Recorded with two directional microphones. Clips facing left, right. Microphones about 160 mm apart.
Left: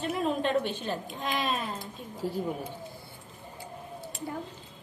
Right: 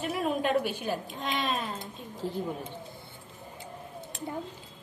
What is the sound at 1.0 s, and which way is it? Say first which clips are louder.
Speech: left 1 dB; centre (ahead or behind).